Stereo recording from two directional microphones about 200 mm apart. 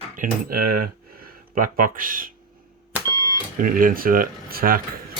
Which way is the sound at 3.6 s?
45° right (ahead or behind).